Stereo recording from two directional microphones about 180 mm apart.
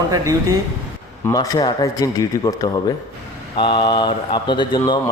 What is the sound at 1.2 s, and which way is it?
Speech, 20° left (ahead or behind).